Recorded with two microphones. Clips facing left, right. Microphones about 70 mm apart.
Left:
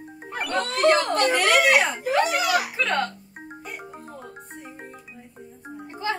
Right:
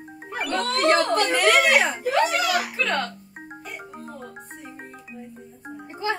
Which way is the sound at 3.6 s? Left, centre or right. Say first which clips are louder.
Right 1 dB; centre.